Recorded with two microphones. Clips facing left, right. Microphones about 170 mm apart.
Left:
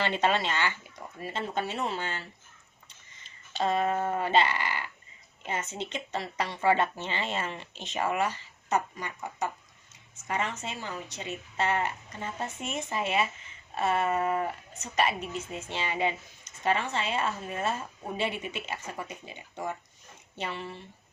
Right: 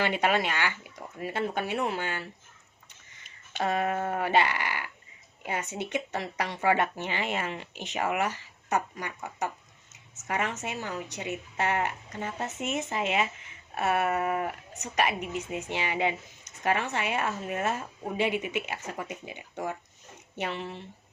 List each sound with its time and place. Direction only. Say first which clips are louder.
0.0 s speech: right 1 dB; 10° right (ahead or behind)
3.6 s speech: left 1 dB; 15° right (ahead or behind)